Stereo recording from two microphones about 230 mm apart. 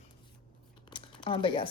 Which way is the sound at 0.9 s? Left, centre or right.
Left.